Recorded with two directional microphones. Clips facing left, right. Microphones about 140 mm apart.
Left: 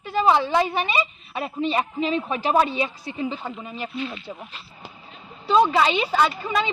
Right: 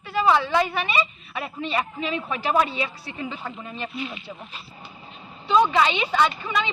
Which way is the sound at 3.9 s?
10° right (ahead or behind).